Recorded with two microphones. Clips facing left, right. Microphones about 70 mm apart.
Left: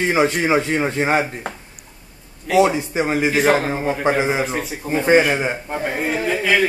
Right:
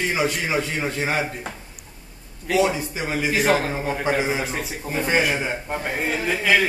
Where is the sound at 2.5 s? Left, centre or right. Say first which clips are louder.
Left 5 dB; left.